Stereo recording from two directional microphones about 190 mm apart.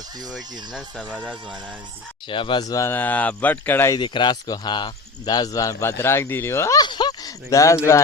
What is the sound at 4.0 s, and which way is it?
A man's voice, 25° left (ahead or behind).